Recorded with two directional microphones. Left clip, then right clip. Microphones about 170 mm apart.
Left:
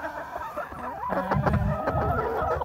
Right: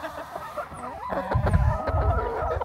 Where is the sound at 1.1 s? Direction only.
15° left (ahead or behind).